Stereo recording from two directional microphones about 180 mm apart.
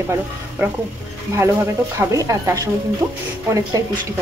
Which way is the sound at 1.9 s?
15° right (ahead or behind).